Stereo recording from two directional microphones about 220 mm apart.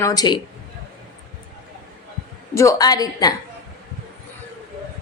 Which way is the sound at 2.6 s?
15° left (ahead or behind).